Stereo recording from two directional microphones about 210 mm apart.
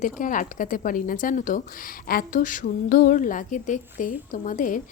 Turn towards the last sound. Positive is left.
turn(degrees=40)  # may be behind; listen again after turning